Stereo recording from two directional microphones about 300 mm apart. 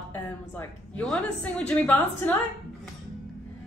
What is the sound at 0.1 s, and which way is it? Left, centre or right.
A woman's voice, centre.